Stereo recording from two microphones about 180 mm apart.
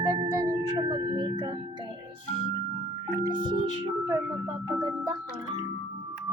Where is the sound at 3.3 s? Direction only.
25° right (ahead or behind).